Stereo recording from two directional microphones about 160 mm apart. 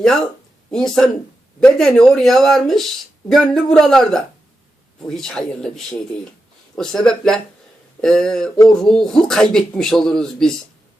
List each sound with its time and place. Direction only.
0.0 s speech: 5° left (ahead or behind)